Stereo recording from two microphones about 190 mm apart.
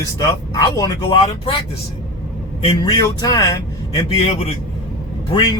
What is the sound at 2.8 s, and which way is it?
Speech, 20° left (ahead or behind).